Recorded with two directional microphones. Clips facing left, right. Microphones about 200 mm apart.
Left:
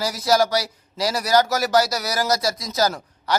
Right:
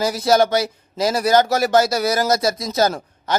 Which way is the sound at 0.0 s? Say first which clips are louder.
Right 3 dB; 25° right (ahead or behind).